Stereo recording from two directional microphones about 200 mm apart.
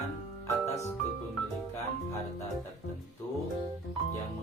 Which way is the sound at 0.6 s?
15° left (ahead or behind).